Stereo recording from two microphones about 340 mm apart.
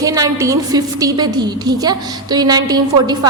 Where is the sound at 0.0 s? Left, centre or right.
Centre.